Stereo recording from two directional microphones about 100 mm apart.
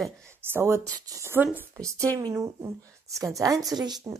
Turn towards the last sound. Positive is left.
turn(degrees=-35)  # may be behind; listen again after turning